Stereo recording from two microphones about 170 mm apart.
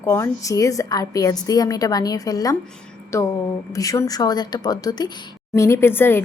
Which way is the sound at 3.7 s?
20° left (ahead or behind).